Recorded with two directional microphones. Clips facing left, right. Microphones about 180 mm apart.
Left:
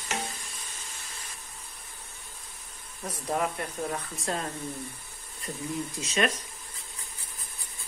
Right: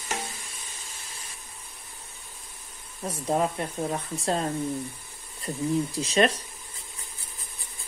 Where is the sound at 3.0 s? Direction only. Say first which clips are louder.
Right 4 dB; 25° right (ahead or behind).